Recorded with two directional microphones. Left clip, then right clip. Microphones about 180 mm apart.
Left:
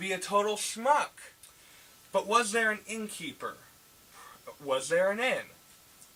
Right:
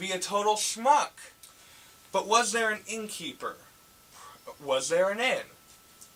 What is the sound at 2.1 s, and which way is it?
Speech, 10° right (ahead or behind).